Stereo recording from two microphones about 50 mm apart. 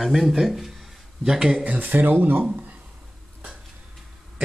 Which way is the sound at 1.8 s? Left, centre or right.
Right.